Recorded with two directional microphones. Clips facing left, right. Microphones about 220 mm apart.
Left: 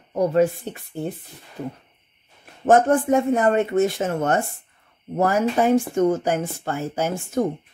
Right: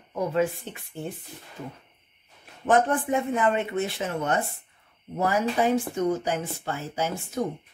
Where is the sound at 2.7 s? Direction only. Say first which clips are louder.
Left 6 dB; 45° left (ahead or behind).